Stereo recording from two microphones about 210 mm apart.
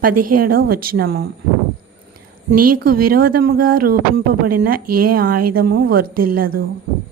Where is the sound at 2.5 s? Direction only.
45° right (ahead or behind).